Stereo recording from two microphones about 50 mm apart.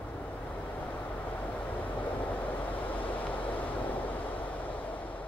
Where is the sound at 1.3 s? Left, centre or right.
Left.